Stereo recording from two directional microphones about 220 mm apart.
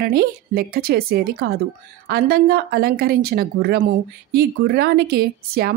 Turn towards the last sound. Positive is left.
turn(degrees=-45)  # may be behind; listen again after turning